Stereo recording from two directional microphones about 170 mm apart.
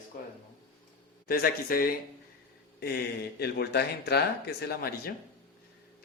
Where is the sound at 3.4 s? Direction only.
70° left (ahead or behind).